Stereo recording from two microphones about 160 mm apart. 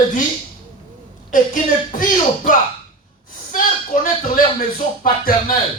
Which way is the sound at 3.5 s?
55° left (ahead or behind).